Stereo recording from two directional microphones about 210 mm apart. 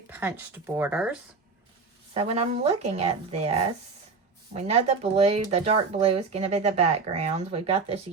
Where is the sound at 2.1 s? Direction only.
30° right (ahead or behind).